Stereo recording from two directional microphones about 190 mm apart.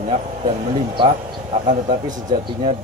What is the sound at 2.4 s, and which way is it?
Speech, 30° right (ahead or behind).